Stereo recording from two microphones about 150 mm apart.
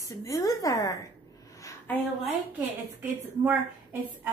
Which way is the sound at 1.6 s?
10° left (ahead or behind).